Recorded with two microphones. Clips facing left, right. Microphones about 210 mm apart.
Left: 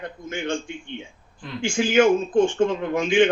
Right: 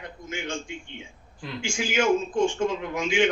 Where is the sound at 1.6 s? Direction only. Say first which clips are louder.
Left 8 dB; 55° left (ahead or behind).